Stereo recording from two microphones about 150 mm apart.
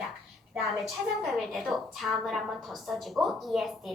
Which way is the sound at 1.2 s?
Centre (ahead or behind).